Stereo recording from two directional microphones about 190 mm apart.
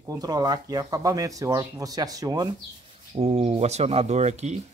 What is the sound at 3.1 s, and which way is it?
Speech, 30° right (ahead or behind).